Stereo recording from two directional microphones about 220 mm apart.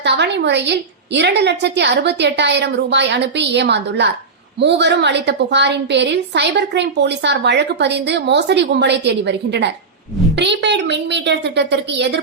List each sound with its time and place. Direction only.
0.0 s a woman's voice: 50° right (ahead or behind)